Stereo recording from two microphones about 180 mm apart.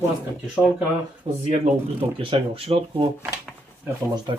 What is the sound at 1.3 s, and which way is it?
Speech, 30° right (ahead or behind).